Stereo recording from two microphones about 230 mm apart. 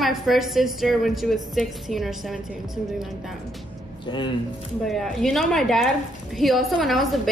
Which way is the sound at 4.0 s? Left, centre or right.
Left.